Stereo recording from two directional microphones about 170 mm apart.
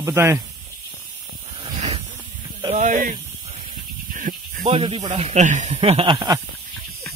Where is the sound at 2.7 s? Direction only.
50° right (ahead or behind).